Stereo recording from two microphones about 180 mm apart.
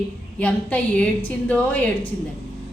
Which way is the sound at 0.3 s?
10° left (ahead or behind).